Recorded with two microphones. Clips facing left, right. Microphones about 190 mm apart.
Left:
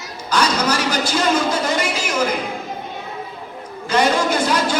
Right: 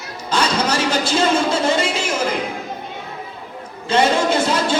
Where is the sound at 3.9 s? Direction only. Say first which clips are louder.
Right 1 dB; 25° right (ahead or behind).